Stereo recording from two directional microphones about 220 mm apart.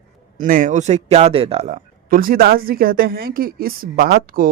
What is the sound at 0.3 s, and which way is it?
A man's voice, 35° right (ahead or behind).